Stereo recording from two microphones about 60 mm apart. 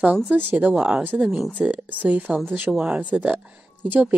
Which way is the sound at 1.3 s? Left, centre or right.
Centre.